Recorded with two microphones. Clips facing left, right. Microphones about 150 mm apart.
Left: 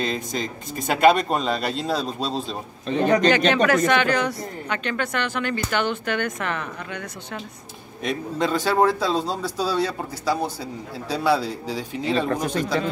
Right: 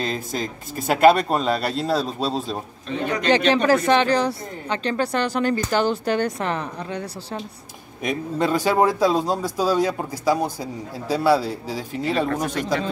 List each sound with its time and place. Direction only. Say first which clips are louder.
0.0 s speech: even; 5° right (ahead or behind)
2.9 s a man's voice: left 6 dB; 35° left (ahead or behind)
3.3 s speech: right 1 dB; 30° right (ahead or behind)
8.0 s speech: right 1 dB; 10° right (ahead or behind)
12.3 s a man's voice: even; 35° left (ahead or behind)